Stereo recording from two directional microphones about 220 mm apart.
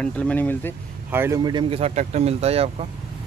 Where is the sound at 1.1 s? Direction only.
10° right (ahead or behind).